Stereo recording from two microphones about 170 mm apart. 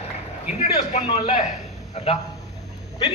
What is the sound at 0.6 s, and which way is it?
A man's voice, 40° left (ahead or behind).